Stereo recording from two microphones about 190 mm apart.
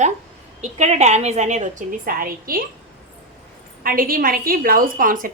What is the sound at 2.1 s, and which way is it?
Speech, 50° right (ahead or behind).